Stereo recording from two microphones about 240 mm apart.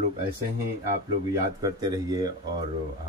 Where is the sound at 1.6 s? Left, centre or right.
Centre.